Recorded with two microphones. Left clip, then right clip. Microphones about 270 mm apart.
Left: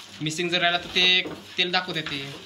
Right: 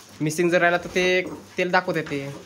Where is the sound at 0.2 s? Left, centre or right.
Centre.